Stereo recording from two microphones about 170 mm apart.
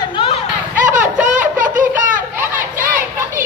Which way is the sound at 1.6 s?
50° right (ahead or behind).